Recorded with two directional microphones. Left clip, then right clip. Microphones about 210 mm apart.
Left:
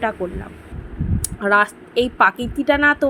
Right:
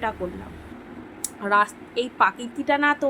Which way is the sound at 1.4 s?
20° left (ahead or behind).